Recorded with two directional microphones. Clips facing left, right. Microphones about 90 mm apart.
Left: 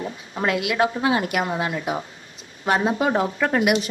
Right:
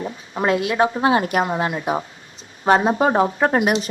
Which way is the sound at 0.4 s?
30° right (ahead or behind).